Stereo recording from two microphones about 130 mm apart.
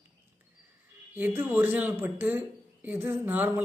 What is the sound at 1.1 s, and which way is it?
A woman's voice, 15° right (ahead or behind).